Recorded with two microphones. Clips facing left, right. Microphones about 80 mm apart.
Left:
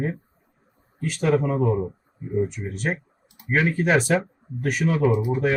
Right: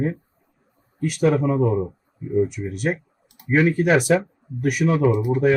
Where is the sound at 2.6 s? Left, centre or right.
Centre.